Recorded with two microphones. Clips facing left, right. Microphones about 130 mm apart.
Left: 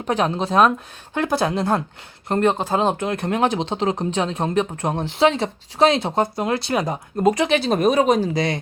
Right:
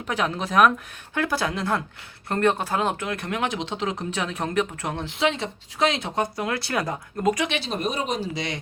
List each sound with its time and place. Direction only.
0.1 s a woman's voice: 30° left (ahead or behind)